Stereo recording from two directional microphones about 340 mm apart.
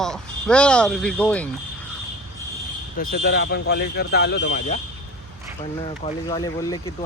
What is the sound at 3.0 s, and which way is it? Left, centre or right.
Speech, left.